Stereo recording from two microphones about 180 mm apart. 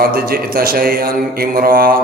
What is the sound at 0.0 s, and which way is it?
Mantra, 55° right (ahead or behind).